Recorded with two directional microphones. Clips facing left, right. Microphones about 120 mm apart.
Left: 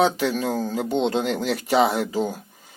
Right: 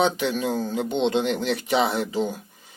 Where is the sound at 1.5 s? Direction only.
40° left (ahead or behind).